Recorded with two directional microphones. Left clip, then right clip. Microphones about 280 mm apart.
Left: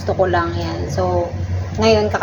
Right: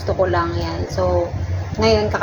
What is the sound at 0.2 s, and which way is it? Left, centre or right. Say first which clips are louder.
Speech: left 1 dB; centre.